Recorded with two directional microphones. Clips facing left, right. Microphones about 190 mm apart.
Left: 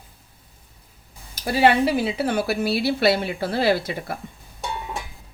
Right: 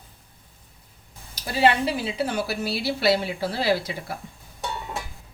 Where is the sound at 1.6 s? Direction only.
60° left (ahead or behind).